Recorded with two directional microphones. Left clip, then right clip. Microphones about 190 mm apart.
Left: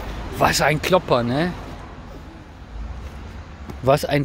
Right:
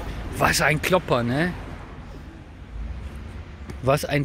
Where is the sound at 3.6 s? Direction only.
15° left (ahead or behind).